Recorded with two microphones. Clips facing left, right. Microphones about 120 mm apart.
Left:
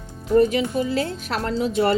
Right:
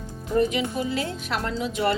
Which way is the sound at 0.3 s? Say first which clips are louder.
Left 5 dB; 40° left (ahead or behind).